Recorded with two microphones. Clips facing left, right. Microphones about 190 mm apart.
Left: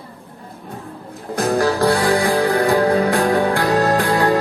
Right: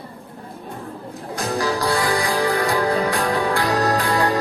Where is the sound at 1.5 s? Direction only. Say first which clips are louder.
Left 4 dB; 55° left (ahead or behind).